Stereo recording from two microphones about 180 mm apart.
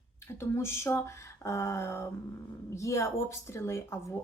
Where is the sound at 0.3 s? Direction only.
15° left (ahead or behind).